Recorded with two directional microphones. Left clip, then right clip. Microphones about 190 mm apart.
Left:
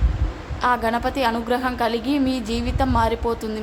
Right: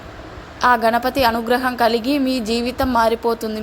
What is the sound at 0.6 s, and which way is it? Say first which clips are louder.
A woman's voice: right 5 dB; 20° right (ahead or behind).